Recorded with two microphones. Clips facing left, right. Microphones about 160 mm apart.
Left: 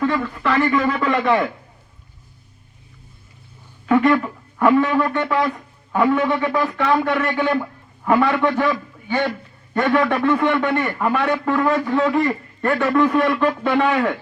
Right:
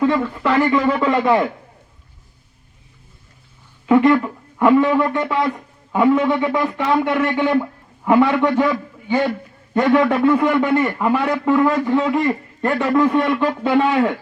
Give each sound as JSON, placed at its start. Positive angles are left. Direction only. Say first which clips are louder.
{"t": 0.0, "sound": "a man's voice", "louder": "right 3 dB", "side_deg": -25}
{"t": 3.8, "sound": "a man's voice", "louder": "right 3 dB", "side_deg": -20}